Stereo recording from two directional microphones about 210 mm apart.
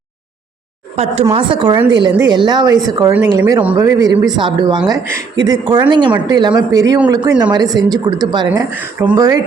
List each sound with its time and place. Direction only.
0.9 s a woman's voice: 30° right (ahead or behind)
8.4 s speech: 10° right (ahead or behind)